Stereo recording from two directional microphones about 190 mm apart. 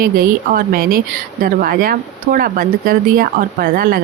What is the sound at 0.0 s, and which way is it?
Speech, 50° right (ahead or behind).